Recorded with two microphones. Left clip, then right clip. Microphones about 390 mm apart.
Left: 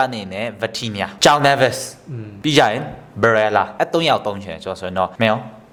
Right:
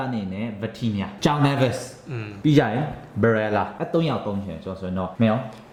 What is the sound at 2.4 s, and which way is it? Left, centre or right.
A man's voice, left.